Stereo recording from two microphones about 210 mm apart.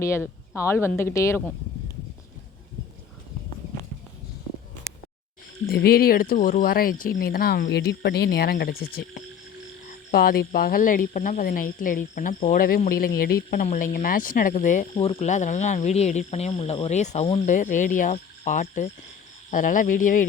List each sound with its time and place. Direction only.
0.0 s speech: 15° left (ahead or behind)
5.6 s speech: 45° left (ahead or behind)